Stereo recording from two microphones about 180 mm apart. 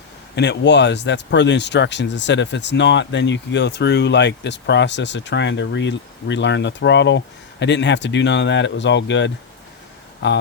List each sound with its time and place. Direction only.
0.3 s speech: 70° left (ahead or behind)